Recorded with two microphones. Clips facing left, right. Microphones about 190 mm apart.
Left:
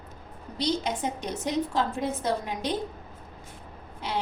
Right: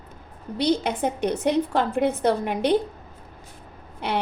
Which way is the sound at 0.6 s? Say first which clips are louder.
Right 5 dB; 60° right (ahead or behind).